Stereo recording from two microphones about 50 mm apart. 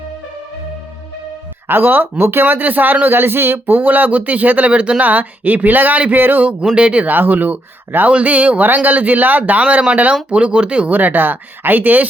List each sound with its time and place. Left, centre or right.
1.6 s a man's voice: right
6.4 s speech: right
7.1 s a man's voice: right
9.6 s speech: right
10.9 s a man's voice: right